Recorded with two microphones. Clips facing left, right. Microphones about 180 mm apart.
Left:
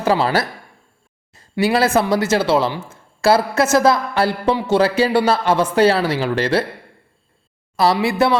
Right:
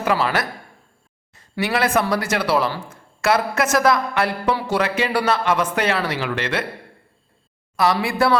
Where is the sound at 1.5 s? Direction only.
30° left (ahead or behind).